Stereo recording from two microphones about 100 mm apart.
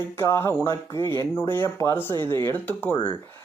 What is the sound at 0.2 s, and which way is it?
Speech, 25° left (ahead or behind).